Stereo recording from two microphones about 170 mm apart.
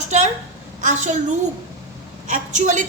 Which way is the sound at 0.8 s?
45° right (ahead or behind).